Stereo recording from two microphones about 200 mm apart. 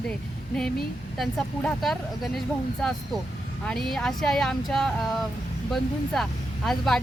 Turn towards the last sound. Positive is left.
turn(degrees=0)  # may be behind; listen again after turning